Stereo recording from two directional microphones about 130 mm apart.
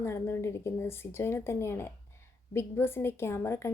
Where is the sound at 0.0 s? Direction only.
20° left (ahead or behind).